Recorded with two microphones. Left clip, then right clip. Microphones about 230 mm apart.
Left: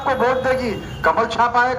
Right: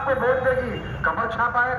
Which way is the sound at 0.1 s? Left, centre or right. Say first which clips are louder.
Left 3 dB; left.